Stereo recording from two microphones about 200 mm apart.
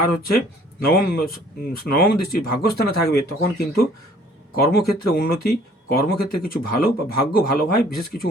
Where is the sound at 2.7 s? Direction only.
55° left (ahead or behind).